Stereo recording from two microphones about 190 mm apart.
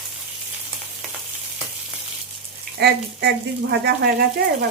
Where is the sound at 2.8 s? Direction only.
60° right (ahead or behind).